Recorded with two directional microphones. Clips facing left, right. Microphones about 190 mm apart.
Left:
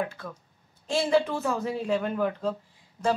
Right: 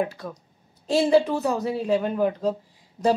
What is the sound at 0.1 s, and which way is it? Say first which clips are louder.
Speech: right 4 dB; 35° right (ahead or behind).